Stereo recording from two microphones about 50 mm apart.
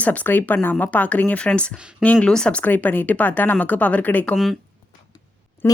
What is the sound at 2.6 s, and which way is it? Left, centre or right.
Speech, left.